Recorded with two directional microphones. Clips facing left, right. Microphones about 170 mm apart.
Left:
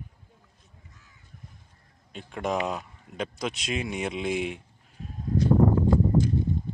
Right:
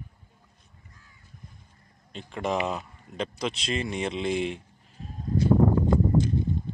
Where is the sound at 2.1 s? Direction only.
Centre (ahead or behind).